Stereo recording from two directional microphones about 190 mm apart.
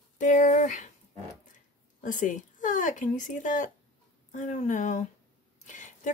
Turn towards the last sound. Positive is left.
turn(degrees=40)  # may be behind; listen again after turning